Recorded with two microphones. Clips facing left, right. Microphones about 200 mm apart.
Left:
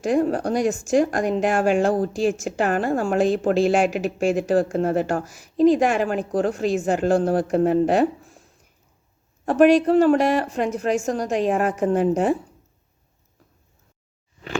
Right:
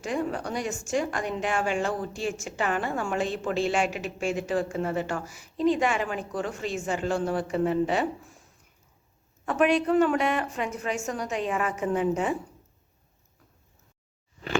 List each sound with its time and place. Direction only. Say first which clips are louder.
0.0 s a woman's voice: left 9 dB; 40° left (ahead or behind)
6.7 s a woman's voice: left 7 dB; 50° left (ahead or behind)
9.5 s a woman's voice: left 8 dB; 35° left (ahead or behind)